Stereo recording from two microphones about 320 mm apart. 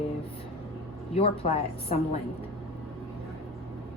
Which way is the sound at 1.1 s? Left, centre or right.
Centre.